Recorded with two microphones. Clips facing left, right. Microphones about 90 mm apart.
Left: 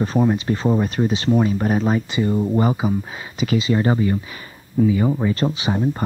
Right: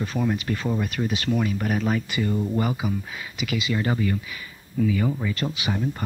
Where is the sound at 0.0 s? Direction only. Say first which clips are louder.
Left 7 dB; 35° left (ahead or behind).